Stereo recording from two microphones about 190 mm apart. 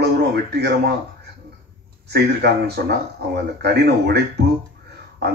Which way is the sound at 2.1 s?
60° right (ahead or behind).